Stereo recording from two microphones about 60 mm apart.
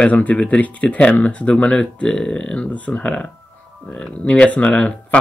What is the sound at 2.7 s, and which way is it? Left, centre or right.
Speech, left.